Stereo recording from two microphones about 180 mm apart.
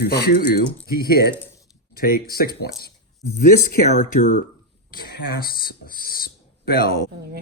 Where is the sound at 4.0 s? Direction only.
40° left (ahead or behind).